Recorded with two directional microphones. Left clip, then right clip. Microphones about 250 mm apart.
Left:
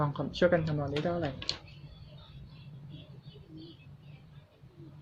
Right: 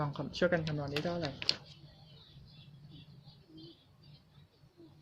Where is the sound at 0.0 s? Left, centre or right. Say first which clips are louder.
Left 5 dB; centre.